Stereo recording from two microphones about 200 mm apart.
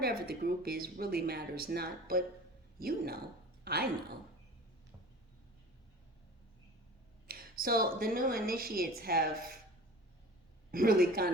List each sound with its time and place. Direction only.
0.0 s speech: 50° right (ahead or behind)
7.3 s a woman's voice: 45° right (ahead or behind)
10.7 s speech: 45° right (ahead or behind)